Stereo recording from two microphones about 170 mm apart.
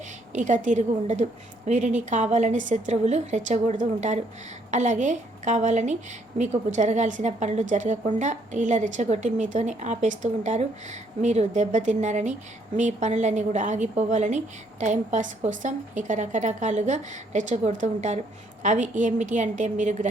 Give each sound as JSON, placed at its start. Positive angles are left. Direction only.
{"t": 0.3, "sound": "a woman's voice", "side_deg": -45}